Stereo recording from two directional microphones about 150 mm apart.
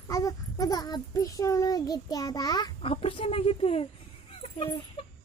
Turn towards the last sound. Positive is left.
turn(degrees=40)  # may be behind; listen again after turning